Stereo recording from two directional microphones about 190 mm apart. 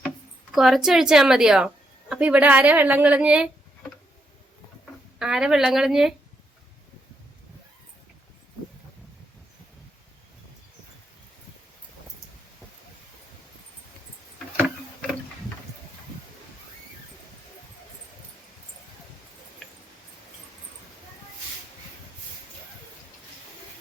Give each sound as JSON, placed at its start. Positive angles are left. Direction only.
{"t": 0.5, "sound": "a woman's voice", "side_deg": 0}
{"t": 5.2, "sound": "a woman's voice", "side_deg": -5}